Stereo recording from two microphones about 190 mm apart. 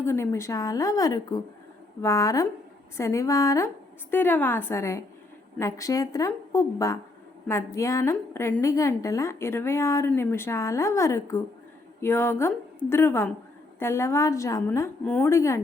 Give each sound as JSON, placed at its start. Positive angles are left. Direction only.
{"t": 0.0, "sound": "a woman's voice", "side_deg": 15}